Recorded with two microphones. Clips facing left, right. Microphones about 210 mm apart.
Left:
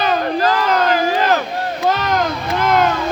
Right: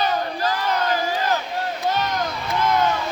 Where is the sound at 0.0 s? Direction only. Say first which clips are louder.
Left 6 dB; 90° left.